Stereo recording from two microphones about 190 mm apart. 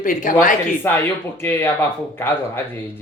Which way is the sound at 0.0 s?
45° left (ahead or behind).